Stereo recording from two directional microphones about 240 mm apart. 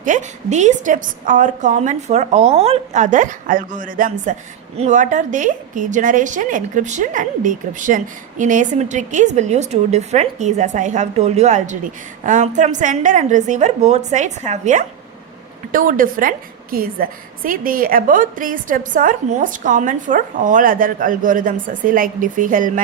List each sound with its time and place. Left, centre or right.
0.0 s a woman's voice: right